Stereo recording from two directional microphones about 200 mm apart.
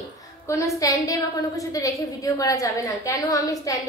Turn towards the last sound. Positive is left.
turn(degrees=15)  # may be behind; listen again after turning